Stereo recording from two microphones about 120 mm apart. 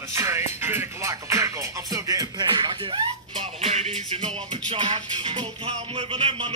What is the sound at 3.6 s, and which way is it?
Music, 55° right (ahead or behind).